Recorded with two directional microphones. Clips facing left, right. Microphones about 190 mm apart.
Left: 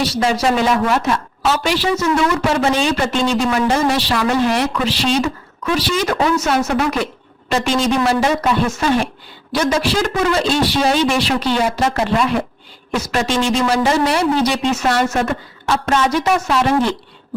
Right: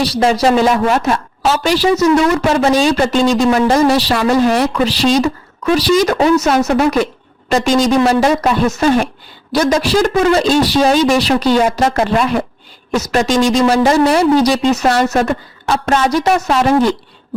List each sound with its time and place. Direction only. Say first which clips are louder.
0.0 s a woman's voice: right 4 dB; 35° right (ahead or behind)